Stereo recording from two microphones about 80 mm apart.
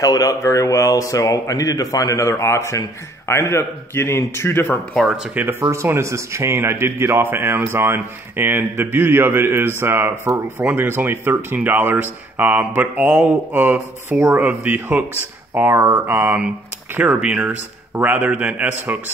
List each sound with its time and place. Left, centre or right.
0.0 s a man's voice: left
5.0 s speech: centre
5.3 s speech: right
5.6 s speech: right; by 17.6 s centre
17.9 s speech: right